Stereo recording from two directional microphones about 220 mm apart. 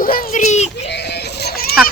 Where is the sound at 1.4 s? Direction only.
45° left (ahead or behind).